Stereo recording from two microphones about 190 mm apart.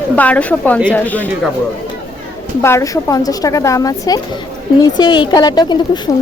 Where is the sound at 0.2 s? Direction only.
5° left (ahead or behind).